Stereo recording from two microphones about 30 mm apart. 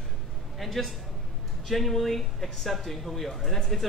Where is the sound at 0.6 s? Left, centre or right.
Centre.